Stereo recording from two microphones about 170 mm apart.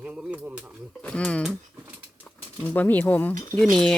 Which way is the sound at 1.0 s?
5° left (ahead or behind).